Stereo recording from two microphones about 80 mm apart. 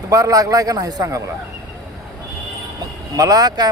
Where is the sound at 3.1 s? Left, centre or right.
Right.